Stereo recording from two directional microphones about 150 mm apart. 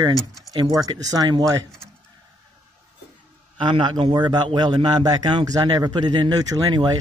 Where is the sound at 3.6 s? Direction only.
30° right (ahead or behind).